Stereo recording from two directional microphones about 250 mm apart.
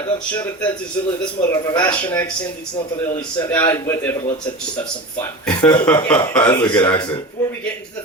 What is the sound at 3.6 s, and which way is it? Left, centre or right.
Speech, centre.